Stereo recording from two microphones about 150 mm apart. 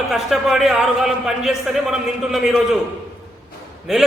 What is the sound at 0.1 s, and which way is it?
A man's voice, centre (ahead or behind).